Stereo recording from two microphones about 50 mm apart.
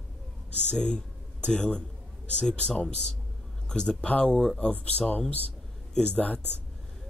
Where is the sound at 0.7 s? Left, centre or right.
Centre.